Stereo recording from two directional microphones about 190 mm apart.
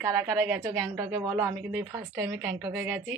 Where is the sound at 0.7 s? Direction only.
15° right (ahead or behind).